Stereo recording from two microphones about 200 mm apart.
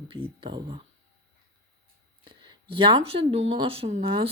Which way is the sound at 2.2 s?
25° right (ahead or behind).